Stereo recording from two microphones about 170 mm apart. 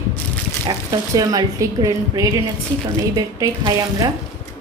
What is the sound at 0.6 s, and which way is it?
Speech, 20° right (ahead or behind).